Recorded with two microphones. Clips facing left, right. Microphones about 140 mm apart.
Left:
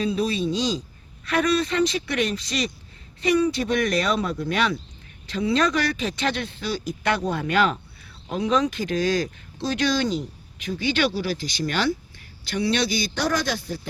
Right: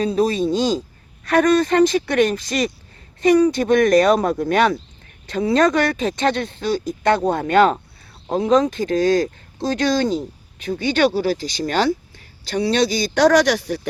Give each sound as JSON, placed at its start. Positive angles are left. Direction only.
{"t": 0.0, "sound": "a woman's voice", "side_deg": -45}
{"t": 8.8, "sound": "a woman's voice", "side_deg": -30}
{"t": 13.1, "sound": "speech", "side_deg": -85}